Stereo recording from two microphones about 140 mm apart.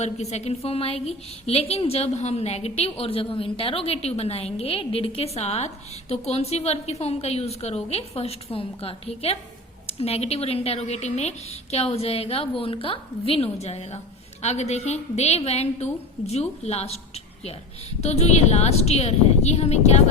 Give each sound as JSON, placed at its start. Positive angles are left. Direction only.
{"t": 0.0, "sound": "a woman's voice", "side_deg": 50}
{"t": 18.0, "sound": "a woman's voice", "side_deg": 50}